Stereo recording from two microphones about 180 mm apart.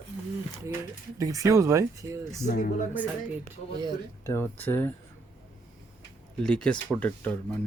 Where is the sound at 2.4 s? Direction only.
50° left (ahead or behind).